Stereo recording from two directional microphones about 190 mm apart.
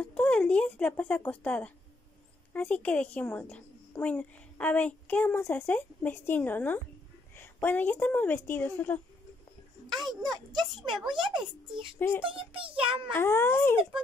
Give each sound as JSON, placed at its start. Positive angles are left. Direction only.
{"t": 0.0, "sound": "a woman's voice", "side_deg": 5}
{"t": 10.2, "sound": "a child's voice", "side_deg": -20}
{"t": 10.6, "sound": "speech", "side_deg": 0}
{"t": 11.1, "sound": "a child's voice", "side_deg": -25}
{"t": 13.1, "sound": "a woman's voice", "side_deg": 10}